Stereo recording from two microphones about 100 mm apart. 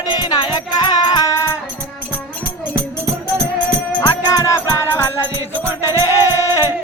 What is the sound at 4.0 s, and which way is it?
Music, 40° left (ahead or behind).